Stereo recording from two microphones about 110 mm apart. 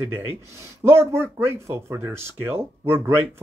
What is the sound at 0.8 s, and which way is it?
Speech, 25° right (ahead or behind).